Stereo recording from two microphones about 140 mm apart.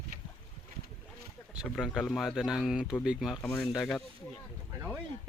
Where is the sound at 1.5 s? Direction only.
5° right (ahead or behind).